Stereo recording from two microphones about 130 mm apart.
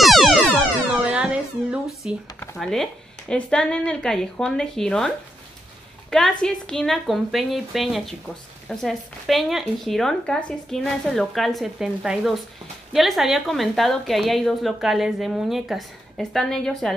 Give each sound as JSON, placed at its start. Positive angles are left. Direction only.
{"t": 0.0, "sound": "music", "side_deg": 0}
{"t": 2.0, "sound": "a woman's voice", "side_deg": -5}